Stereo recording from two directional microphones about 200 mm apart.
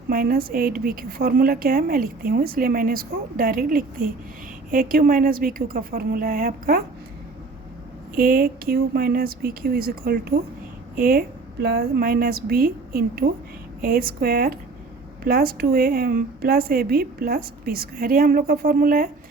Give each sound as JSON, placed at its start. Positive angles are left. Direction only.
{"t": 0.1, "sound": "a woman's voice", "side_deg": -45}
{"t": 8.1, "sound": "a woman's voice", "side_deg": -45}